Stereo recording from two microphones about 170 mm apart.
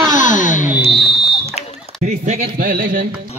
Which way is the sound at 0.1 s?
50° left (ahead or behind).